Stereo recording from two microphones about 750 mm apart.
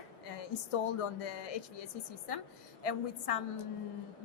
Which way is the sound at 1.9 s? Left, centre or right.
Left.